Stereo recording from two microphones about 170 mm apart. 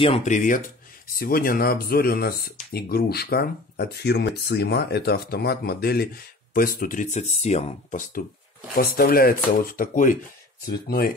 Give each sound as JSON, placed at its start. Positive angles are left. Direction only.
{"t": 0.0, "sound": "speech", "side_deg": 40}
{"t": 8.7, "sound": "speech", "side_deg": 60}